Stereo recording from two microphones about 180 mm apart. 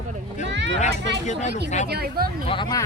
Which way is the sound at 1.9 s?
60° right (ahead or behind).